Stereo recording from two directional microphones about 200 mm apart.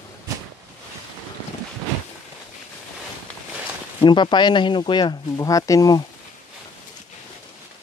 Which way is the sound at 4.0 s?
25° left (ahead or behind).